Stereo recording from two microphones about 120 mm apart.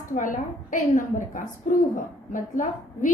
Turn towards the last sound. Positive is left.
turn(degrees=90)